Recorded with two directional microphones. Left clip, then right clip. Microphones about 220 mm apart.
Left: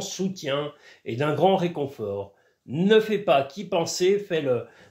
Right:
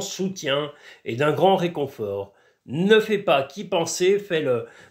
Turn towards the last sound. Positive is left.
turn(degrees=-20)  # may be behind; listen again after turning